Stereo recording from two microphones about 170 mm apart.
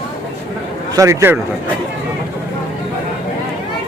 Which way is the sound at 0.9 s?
15° right (ahead or behind).